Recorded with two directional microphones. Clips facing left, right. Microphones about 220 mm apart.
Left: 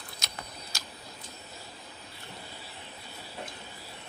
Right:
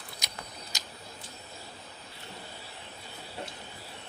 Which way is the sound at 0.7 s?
20° right (ahead or behind).